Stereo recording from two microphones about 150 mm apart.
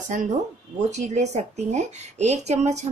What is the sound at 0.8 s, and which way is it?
A woman's voice, 50° right (ahead or behind).